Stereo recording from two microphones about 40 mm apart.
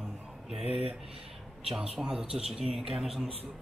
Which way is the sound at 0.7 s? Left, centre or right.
Right.